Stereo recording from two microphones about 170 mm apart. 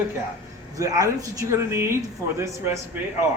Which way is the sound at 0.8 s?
20° right (ahead or behind).